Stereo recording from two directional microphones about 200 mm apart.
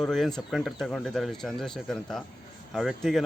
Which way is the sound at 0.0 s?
Centre (ahead or behind).